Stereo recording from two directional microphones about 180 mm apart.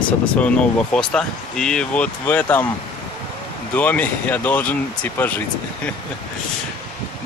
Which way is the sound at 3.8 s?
10° left (ahead or behind).